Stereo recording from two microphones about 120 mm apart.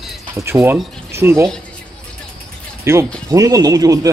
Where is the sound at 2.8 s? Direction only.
25° right (ahead or behind).